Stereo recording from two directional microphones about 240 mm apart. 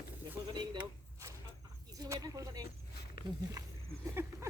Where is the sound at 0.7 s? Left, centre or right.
Centre.